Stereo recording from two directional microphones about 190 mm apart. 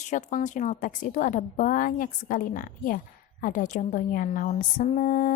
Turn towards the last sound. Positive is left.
turn(degrees=45)  # may be behind; listen again after turning